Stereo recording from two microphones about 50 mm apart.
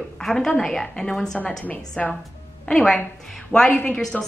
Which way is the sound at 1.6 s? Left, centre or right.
Left.